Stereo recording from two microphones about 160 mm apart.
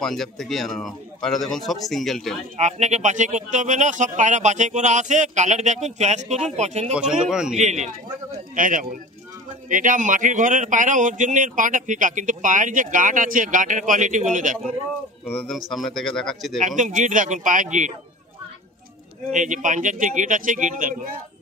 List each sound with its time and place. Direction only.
0.0 s a man's voice: centre (ahead or behind)
2.6 s speech: 45° right (ahead or behind)
7.0 s a man's voice: 5° right (ahead or behind)
7.5 s speech: 45° right (ahead or behind)
8.5 s speech: 55° right (ahead or behind)
15.7 s a man's voice: centre (ahead or behind)
16.6 s speech: 50° right (ahead or behind)
19.3 s speech: 50° right (ahead or behind)